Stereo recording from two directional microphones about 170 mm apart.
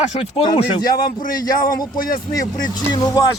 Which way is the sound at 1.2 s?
55° left (ahead or behind).